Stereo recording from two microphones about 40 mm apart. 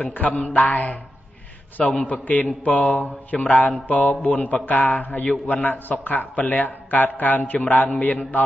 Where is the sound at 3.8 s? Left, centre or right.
Left.